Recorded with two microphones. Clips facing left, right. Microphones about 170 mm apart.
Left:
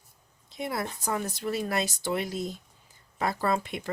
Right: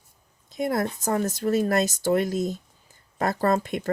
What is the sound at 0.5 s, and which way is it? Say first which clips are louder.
Speech: right 7 dB; 45° right (ahead or behind).